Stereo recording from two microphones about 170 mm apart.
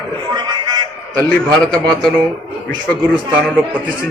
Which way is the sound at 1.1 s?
5° left (ahead or behind).